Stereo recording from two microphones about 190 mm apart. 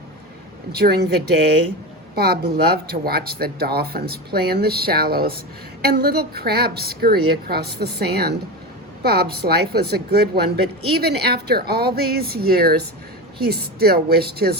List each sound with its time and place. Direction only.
0.8 s speech: 55° right (ahead or behind)